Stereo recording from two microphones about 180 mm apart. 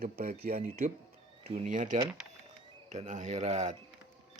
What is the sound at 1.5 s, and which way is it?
Speech, 40° right (ahead or behind).